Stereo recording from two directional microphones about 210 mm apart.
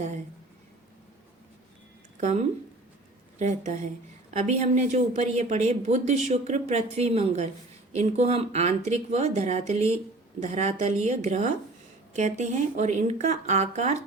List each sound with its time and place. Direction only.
3.3 s speech: 35° right (ahead or behind)